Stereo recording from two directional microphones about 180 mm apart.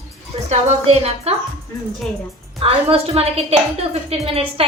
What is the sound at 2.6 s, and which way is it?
A woman's voice, 30° right (ahead or behind).